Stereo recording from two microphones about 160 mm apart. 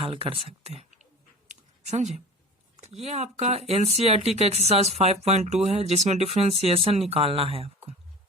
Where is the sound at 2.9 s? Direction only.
45° right (ahead or behind).